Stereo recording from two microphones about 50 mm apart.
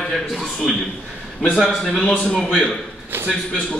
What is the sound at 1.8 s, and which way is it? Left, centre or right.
Speech, centre.